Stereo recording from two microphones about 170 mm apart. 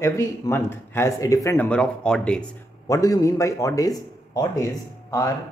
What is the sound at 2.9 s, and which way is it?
Speech, 20° left (ahead or behind).